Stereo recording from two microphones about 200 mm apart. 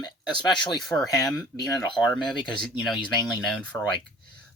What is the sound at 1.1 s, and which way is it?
Speech, 20° left (ahead or behind).